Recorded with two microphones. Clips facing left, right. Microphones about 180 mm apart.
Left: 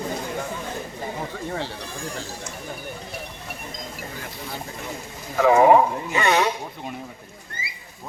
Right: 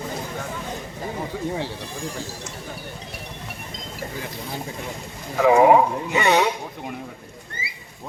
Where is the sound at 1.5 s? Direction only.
15° right (ahead or behind).